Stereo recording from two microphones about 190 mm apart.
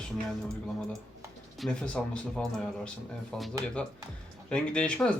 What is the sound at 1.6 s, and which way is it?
Speech, 5° left (ahead or behind).